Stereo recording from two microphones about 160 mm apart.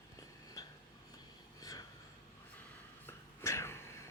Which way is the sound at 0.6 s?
20° left (ahead or behind).